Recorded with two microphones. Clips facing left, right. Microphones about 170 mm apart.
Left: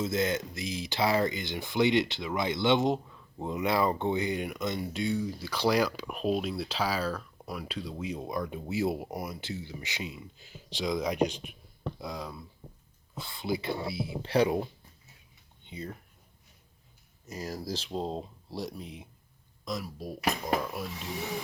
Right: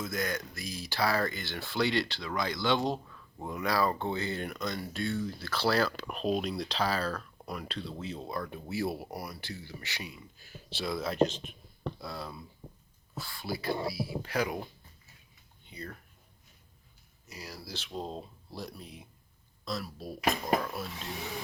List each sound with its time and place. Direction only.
0.0 s speech: 25° left (ahead or behind)
15.7 s speech: 20° left (ahead or behind)
17.2 s speech: 45° left (ahead or behind); by 21.1 s 10° left (ahead or behind)